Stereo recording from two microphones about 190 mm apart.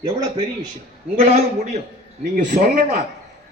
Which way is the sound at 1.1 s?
35° right (ahead or behind).